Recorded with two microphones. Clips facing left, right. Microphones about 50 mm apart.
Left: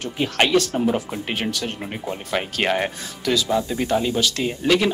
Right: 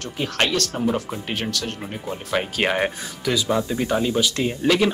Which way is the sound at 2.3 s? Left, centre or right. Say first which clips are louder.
Even; centre.